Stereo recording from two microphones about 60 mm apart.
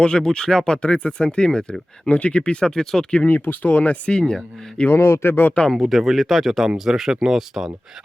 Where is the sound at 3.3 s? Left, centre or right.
Left; by 4.9 s centre.